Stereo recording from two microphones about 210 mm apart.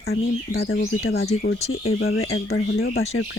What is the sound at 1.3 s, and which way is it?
Speech, 30° left (ahead or behind).